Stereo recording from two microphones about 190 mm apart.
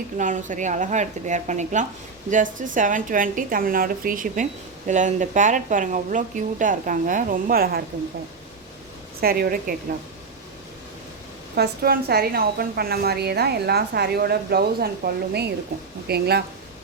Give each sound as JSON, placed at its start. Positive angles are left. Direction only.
{"t": 0.2, "sound": "speech", "side_deg": -40}
{"t": 9.2, "sound": "speech", "side_deg": -50}
{"t": 11.5, "sound": "a woman's voice", "side_deg": -55}